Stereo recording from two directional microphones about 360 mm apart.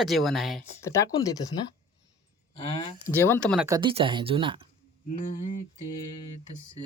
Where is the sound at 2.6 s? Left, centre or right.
Centre.